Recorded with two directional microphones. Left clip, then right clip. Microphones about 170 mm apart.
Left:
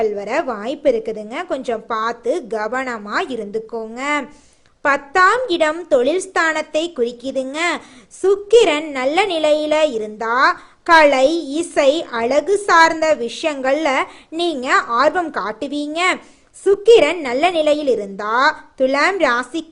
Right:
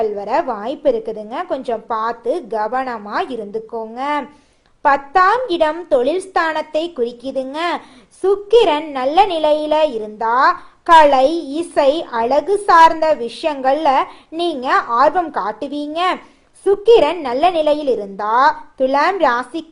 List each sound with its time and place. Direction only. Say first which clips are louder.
0.0 s a woman's voice: right 1 dB; 15° left (ahead or behind)